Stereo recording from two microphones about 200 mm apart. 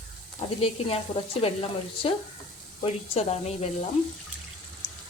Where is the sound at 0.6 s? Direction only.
30° left (ahead or behind).